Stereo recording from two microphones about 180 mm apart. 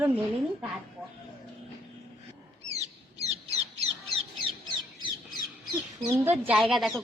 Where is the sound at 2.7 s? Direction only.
35° right (ahead or behind).